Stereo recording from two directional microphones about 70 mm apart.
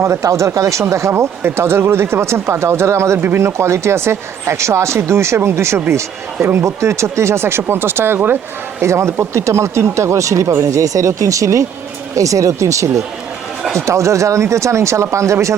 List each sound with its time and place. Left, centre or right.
0.0 s speech: right